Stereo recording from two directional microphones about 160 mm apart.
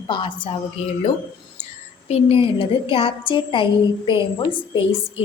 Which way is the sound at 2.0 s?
35° left (ahead or behind).